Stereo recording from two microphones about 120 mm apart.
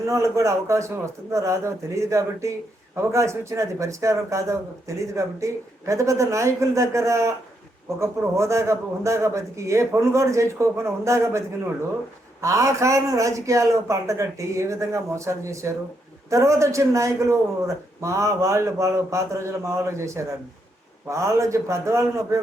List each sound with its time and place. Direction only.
0.1 s a man's voice: 25° right (ahead or behind)